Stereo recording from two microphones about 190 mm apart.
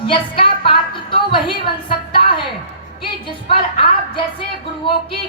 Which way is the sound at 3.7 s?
25° left (ahead or behind).